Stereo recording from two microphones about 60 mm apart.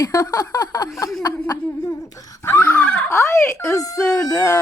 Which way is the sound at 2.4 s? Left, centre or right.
Left.